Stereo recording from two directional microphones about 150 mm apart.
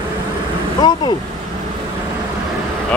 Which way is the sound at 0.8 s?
30° left (ahead or behind).